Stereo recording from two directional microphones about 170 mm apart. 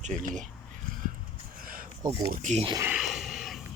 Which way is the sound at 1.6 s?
55° right (ahead or behind).